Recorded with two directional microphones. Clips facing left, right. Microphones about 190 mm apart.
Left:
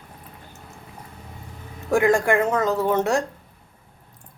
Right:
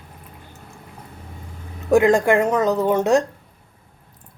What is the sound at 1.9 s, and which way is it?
Speech, 20° right (ahead or behind).